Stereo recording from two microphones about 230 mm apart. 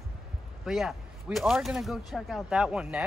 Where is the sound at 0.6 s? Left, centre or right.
Centre.